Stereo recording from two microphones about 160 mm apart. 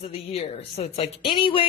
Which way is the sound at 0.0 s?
40° left (ahead or behind).